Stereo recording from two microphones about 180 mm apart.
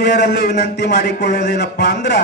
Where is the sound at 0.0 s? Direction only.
70° left (ahead or behind).